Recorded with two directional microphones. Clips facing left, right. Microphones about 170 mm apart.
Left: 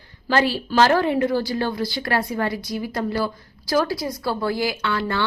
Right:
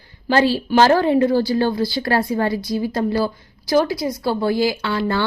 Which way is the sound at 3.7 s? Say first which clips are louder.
Right 4 dB; 20° right (ahead or behind).